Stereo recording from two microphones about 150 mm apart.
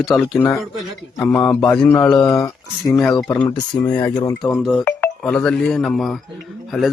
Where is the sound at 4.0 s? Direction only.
30° left (ahead or behind).